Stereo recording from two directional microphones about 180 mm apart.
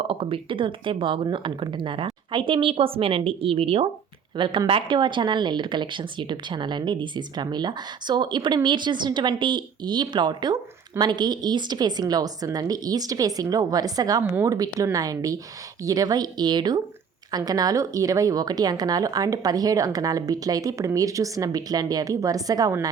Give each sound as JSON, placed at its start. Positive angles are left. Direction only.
{"t": 0.1, "sound": "speech", "side_deg": -30}